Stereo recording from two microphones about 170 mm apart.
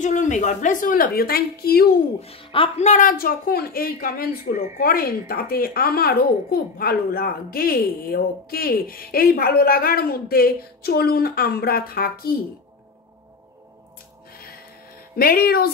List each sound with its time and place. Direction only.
0.0 s a woman's voice: 45° left (ahead or behind); by 1.9 s 65° left (ahead or behind)
2.1 s a child's voice: 35° left (ahead or behind)
2.9 s a woman's voice: 55° left (ahead or behind)
15.1 s a woman's voice: 60° left (ahead or behind)